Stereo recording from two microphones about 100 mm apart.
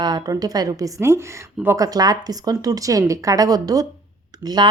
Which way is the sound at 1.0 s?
25° right (ahead or behind).